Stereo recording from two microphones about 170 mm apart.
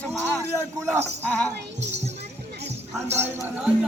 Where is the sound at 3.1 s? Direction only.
10° right (ahead or behind).